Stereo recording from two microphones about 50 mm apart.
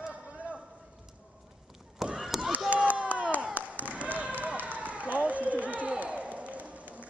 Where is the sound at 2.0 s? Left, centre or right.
Centre.